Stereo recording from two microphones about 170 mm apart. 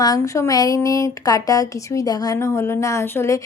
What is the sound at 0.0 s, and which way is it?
A woman's voice, 20° left (ahead or behind).